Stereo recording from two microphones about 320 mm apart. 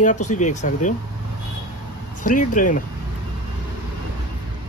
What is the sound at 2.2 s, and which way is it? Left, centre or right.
Speech, left.